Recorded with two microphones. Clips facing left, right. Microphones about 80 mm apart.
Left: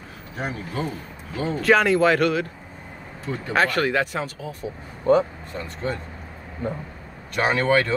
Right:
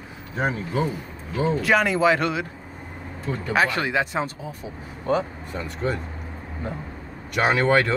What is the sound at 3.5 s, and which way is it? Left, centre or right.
Speech, centre.